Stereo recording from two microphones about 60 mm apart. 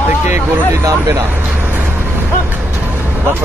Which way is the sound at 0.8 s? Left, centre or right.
Right.